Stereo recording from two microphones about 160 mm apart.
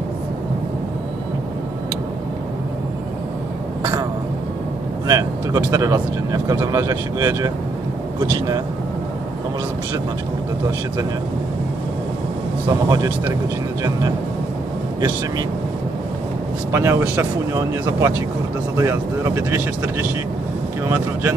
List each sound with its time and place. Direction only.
5.0 s vehicle: 25° right (ahead or behind)
5.7 s speech: 20° right (ahead or behind)
12.6 s speech: 20° right (ahead or behind)
16.7 s speech: 15° right (ahead or behind)